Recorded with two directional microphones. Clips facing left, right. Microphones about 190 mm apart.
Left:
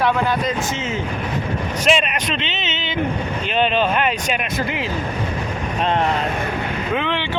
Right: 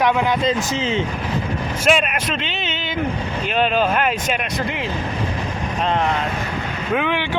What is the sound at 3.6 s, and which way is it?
Speech, 5° right (ahead or behind).